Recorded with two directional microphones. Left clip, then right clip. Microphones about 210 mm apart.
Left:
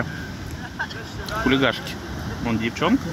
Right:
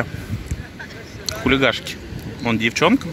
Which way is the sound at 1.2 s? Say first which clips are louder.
Right 3 dB; 10° right (ahead or behind).